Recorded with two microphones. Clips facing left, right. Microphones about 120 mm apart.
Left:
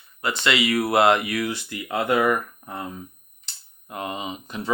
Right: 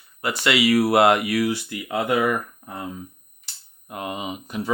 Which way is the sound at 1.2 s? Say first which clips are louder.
Right 4 dB; 30° right (ahead or behind).